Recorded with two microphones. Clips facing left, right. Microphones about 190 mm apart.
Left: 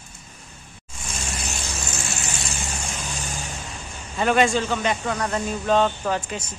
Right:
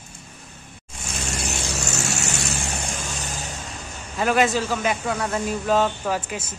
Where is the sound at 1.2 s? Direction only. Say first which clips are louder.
Right 5 dB; 75° right (ahead or behind).